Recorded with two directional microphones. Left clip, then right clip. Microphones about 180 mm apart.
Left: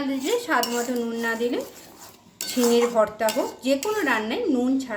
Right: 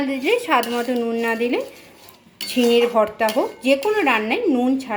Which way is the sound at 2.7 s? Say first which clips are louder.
Right 3 dB; 10° right (ahead or behind).